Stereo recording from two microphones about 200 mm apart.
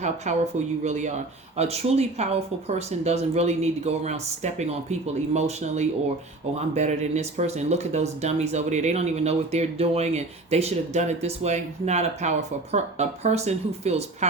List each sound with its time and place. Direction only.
0.3 s speech: 35° right (ahead or behind)